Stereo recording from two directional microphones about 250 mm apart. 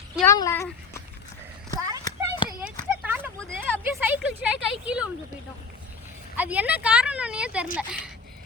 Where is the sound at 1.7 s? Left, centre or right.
Centre.